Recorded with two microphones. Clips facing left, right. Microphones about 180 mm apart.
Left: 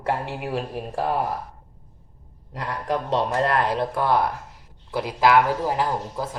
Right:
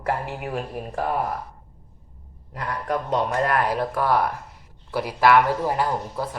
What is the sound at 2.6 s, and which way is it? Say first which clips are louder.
A man's voice: even; 30° left (ahead or behind).